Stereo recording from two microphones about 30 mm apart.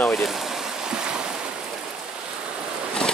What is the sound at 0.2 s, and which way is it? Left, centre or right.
Speech, centre.